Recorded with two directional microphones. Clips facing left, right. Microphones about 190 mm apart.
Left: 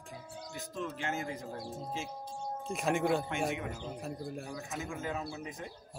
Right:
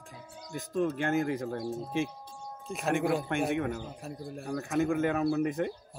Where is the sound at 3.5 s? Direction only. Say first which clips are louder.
Right 7 dB; 60° right (ahead or behind).